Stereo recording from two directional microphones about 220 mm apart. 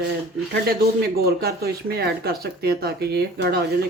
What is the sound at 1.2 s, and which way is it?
Speech, 45° right (ahead or behind).